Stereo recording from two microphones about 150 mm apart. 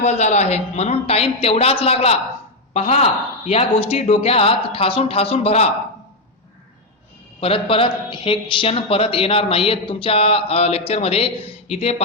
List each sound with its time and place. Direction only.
0.0 s speech: 50° left (ahead or behind)
7.3 s a man's voice: 35° left (ahead or behind)